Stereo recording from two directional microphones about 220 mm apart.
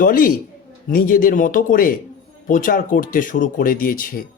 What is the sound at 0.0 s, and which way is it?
A man's voice, 40° left (ahead or behind).